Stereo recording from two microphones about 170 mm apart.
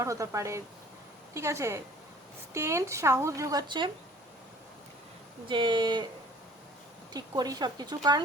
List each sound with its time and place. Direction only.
0.0 s speech: 20° right (ahead or behind)
5.5 s a woman's voice: 30° right (ahead or behind)
7.1 s a woman's voice: 25° right (ahead or behind)